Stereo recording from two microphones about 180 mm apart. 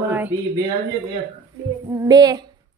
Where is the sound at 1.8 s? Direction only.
20° right (ahead or behind).